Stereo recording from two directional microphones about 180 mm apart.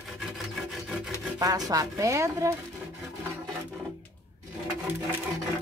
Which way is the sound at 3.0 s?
Centre (ahead or behind).